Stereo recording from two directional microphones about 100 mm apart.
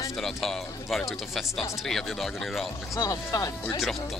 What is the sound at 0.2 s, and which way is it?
Speech, centre (ahead or behind).